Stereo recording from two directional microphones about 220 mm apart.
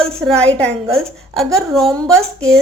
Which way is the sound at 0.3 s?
5° left (ahead or behind).